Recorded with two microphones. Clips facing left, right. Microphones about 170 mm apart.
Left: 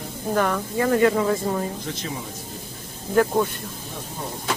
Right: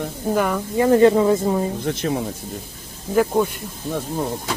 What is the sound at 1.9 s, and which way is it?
Speech, 55° right (ahead or behind).